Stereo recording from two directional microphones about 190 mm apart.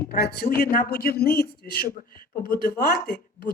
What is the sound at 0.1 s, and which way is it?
A man's voice, 55° left (ahead or behind).